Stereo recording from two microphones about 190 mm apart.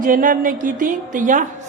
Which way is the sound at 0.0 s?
45° right (ahead or behind).